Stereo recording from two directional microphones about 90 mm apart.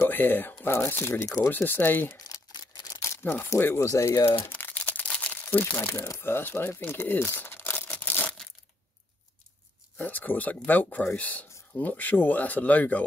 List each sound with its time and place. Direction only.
0.0 s speech: 20° left (ahead or behind)
3.0 s crumpling: 30° left (ahead or behind)
9.9 s speech: 20° left (ahead or behind)